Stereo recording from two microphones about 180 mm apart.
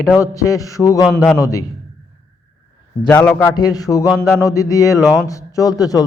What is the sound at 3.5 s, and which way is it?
A man's voice, 20° left (ahead or behind).